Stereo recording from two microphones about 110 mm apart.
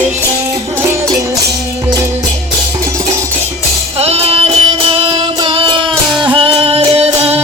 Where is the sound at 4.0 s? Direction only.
65° right (ahead or behind).